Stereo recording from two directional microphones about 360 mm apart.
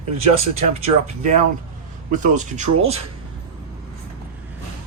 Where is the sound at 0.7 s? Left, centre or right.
Centre.